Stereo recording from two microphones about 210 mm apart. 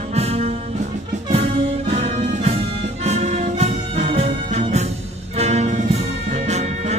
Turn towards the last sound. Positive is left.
turn(degrees=-30)  # may be behind; listen again after turning